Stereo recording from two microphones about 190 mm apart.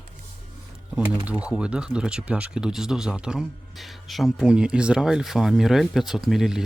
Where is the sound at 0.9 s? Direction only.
5° right (ahead or behind).